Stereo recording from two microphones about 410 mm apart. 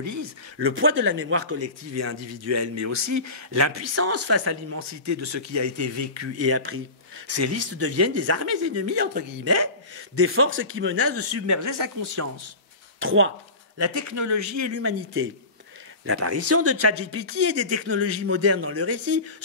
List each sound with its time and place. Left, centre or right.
0.0 s speech: right
13.0 s speech: right
13.7 s speech: right